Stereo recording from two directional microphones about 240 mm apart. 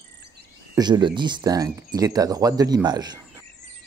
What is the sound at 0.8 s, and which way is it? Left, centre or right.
Speech, centre.